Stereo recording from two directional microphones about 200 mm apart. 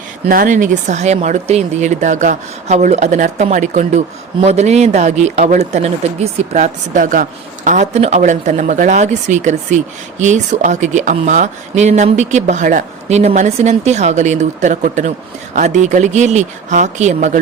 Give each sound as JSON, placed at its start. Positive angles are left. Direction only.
{"t": 0.3, "sound": "speech", "side_deg": -45}